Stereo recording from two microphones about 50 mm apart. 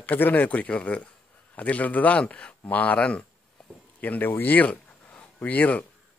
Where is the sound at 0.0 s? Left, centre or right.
Left.